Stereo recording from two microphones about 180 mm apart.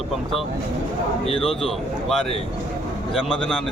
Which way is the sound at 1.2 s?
30° left (ahead or behind).